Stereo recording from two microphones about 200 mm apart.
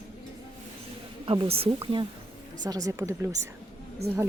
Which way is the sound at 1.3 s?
25° right (ahead or behind).